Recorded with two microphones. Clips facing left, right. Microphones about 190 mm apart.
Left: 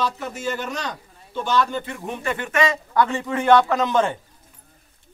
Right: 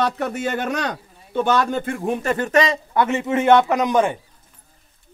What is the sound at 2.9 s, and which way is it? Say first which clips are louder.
A man's voice: right 2 dB; 20° right (ahead or behind).